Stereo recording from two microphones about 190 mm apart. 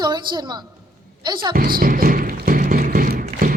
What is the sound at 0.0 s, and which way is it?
A woman's voice, 25° right (ahead or behind).